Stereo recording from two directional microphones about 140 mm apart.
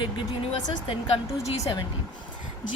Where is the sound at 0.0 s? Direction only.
35° left (ahead or behind).